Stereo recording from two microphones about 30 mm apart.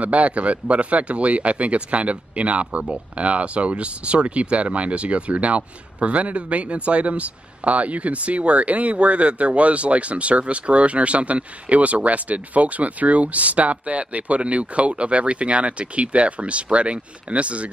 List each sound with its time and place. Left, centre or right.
0.0 s speech: right